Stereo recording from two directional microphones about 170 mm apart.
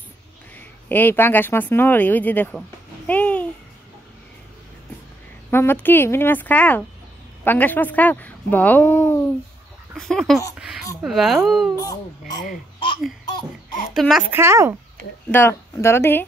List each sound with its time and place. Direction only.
0.6 s speech: 10° left (ahead or behind)
3.1 s babbling: 10° left (ahead or behind)
5.5 s speech: 15° left (ahead or behind)
9.9 s speech: centre (ahead or behind)
11.7 s speech: 20° left (ahead or behind)
13.9 s speech: centre (ahead or behind)
14.3 s speech: 15° right (ahead or behind)
15.3 s speech: 15° left (ahead or behind)